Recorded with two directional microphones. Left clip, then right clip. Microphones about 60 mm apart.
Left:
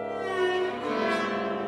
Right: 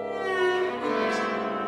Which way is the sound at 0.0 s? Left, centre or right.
Right.